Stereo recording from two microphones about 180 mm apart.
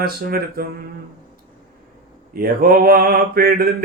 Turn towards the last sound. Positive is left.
turn(degrees=-55)  # may be behind; listen again after turning